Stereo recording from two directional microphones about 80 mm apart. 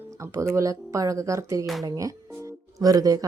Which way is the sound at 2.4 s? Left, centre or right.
Right.